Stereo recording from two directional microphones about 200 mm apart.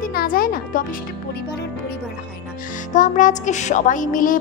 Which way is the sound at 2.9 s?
40° left (ahead or behind).